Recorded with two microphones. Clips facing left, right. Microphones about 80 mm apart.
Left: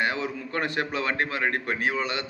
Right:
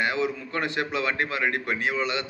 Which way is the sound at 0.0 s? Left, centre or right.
Left.